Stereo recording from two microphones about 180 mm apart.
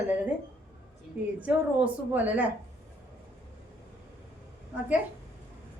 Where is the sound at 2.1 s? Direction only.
10° right (ahead or behind).